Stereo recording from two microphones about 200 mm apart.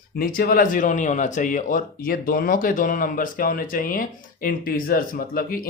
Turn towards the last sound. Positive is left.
turn(degrees=45)  # may be behind; listen again after turning